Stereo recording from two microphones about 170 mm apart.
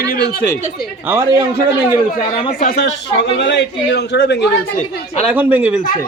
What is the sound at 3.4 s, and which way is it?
A man's voice, 90° left.